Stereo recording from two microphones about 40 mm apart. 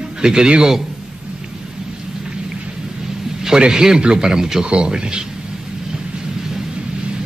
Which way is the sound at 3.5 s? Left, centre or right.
Centre.